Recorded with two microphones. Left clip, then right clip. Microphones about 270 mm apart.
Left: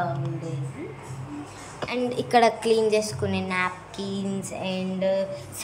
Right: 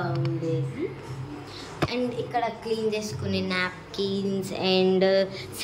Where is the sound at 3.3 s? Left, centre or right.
Centre.